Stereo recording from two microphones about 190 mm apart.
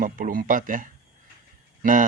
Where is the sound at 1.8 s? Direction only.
45° right (ahead or behind).